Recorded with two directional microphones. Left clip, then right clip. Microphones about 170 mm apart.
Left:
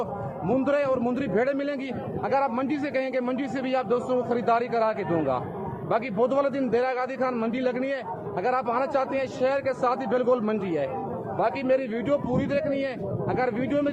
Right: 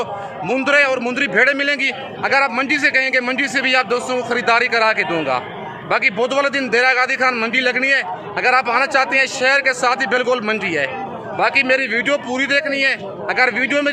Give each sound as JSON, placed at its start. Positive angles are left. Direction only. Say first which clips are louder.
{"t": 0.4, "sound": "a man's voice", "louder": "right 9 dB", "side_deg": -15}